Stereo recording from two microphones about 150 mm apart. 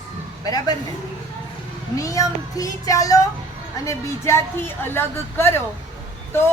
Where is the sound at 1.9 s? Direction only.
20° left (ahead or behind).